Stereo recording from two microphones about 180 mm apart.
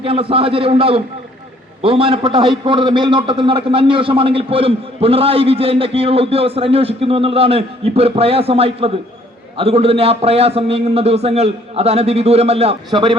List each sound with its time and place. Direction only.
0.0 s a man's voice: 30° right (ahead or behind)